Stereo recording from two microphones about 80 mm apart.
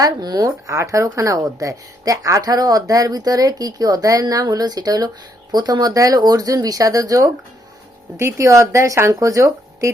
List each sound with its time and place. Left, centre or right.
0.0 s speech: right